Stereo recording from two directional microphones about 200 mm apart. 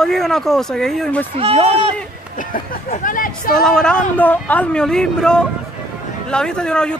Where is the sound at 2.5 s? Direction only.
40° left (ahead or behind).